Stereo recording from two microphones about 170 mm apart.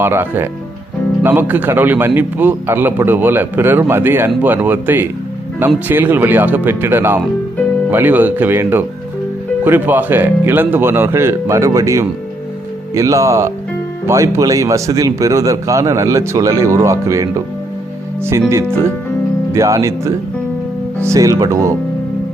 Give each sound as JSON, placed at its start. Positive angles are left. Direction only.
{"t": 0.0, "sound": "a man's voice", "side_deg": -15}